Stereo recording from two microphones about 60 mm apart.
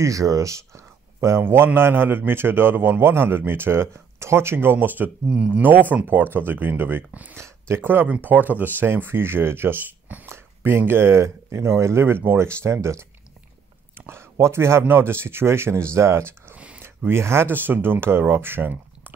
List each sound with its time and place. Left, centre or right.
0.0 s speech: right
1.4 s a man's voice: right
5.3 s speech: centre
5.6 s a man's voice: right
7.3 s a man's voice: right
12.4 s speech: right
13.9 s a sound: right
14.4 s speech: right
16.5 s a sound: centre
16.8 s speech: right